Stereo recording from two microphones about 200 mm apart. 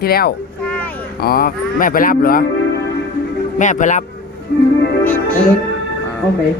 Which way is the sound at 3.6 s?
40° left (ahead or behind).